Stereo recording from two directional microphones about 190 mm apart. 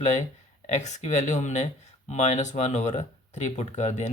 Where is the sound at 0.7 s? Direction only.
40° left (ahead or behind).